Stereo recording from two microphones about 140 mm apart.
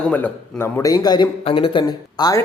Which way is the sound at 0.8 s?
25° left (ahead or behind).